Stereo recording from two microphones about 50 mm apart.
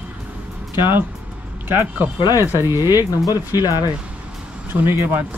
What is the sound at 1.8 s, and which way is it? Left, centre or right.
Speech, right.